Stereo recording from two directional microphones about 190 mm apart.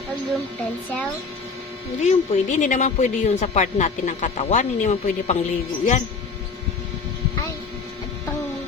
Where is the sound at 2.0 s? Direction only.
40° left (ahead or behind).